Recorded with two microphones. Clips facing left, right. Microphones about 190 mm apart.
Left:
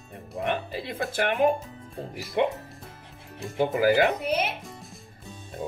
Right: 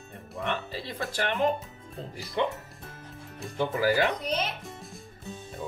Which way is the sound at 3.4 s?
Centre (ahead or behind).